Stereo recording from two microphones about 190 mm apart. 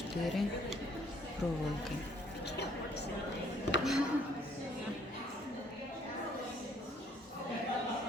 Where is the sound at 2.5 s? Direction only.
60° left (ahead or behind).